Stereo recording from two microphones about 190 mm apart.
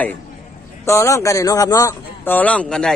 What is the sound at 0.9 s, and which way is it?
A man's voice, 15° left (ahead or behind).